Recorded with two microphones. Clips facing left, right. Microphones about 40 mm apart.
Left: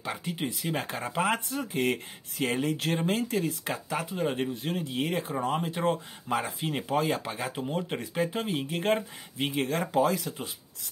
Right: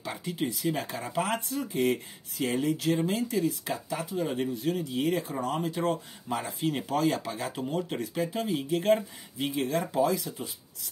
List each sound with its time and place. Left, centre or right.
0.5 s speech: left
5.3 s speech: left
7.3 s speech: left